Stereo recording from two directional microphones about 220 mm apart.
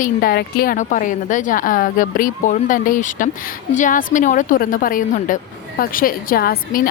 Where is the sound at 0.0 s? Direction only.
40° left (ahead or behind).